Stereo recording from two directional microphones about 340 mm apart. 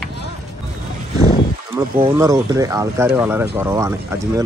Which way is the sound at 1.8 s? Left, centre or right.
Centre.